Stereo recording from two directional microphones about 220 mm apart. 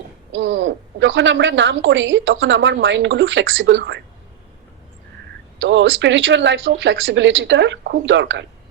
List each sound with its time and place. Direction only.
0.3 s a woman's voice: 55° right (ahead or behind)
5.5 s a woman's voice: 55° right (ahead or behind)